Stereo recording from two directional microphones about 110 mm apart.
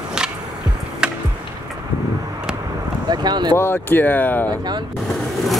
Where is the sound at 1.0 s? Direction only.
10° right (ahead or behind).